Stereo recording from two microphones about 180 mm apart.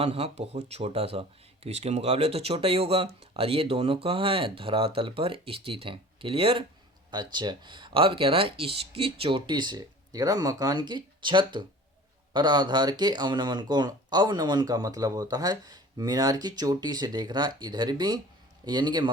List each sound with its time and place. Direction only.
0.0 s speech: 35° right (ahead or behind)